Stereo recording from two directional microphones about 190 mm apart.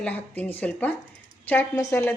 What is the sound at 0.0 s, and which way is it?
A woman's voice, 10° left (ahead or behind).